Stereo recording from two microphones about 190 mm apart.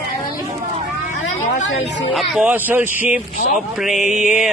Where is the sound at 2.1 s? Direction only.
5° right (ahead or behind).